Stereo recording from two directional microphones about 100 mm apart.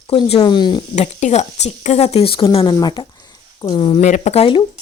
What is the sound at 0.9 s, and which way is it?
A woman's voice, 90° left.